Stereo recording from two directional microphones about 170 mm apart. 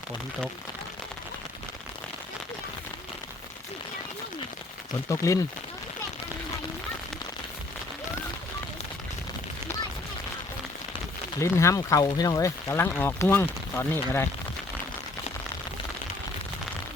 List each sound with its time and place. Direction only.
5.0 s speech: 20° left (ahead or behind)
11.3 s speech: 15° left (ahead or behind)